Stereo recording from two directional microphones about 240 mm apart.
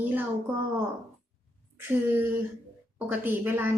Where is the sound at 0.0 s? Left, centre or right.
Centre.